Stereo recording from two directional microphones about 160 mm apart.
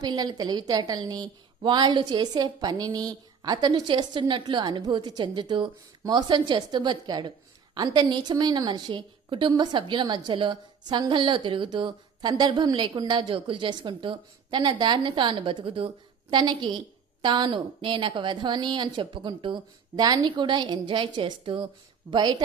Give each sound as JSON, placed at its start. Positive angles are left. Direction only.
{"t": 0.0, "sound": "a woman's voice", "side_deg": -25}